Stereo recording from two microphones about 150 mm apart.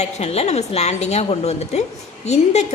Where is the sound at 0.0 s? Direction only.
45° left (ahead or behind).